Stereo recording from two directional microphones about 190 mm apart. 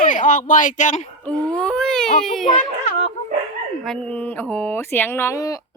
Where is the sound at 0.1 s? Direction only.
45° left (ahead or behind).